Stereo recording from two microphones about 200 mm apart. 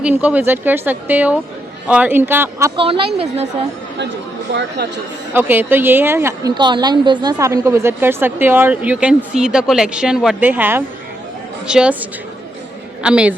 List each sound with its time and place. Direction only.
0.0 s a woman's voice: 10° right (ahead or behind)
2.7 s a woman's voice: 25° right (ahead or behind)
5.3 s a woman's voice: 10° right (ahead or behind)